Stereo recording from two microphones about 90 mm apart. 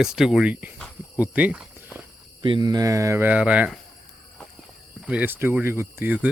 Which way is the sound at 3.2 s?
15° right (ahead or behind).